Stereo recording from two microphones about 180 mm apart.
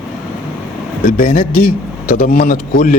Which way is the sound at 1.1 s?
50° left (ahead or behind).